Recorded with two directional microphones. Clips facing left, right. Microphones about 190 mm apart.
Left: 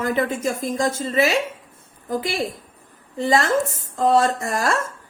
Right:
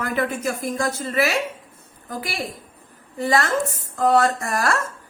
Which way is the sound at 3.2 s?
25° left (ahead or behind).